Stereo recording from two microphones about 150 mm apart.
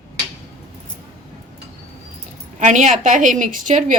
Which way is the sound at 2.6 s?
50° right (ahead or behind).